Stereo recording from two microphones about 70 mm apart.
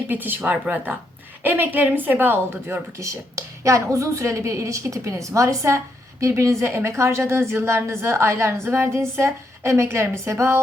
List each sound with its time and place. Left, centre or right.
0.1 s a woman's voice: right
3.0 s a woman's voice: right